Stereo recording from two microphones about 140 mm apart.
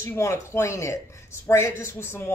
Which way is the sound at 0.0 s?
20° left (ahead or behind).